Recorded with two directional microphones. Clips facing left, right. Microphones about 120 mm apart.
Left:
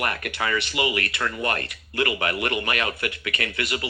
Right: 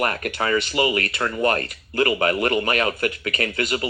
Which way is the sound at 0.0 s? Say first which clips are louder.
Right 4 dB; 35° right (ahead or behind).